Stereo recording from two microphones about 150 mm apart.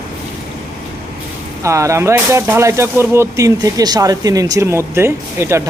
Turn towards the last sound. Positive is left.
turn(degrees=-20)  # may be behind; listen again after turning